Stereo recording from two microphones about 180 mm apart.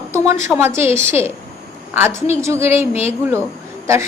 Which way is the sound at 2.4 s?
15° right (ahead or behind).